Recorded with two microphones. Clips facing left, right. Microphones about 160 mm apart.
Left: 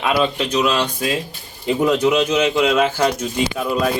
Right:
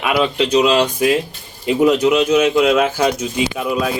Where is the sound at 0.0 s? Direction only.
5° right (ahead or behind).